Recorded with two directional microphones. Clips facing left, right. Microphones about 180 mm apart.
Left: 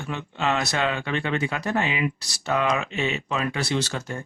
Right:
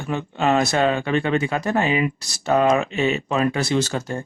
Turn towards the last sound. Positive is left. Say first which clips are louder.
# right 5 dB
turn(degrees=-40)  # may be behind; listen again after turning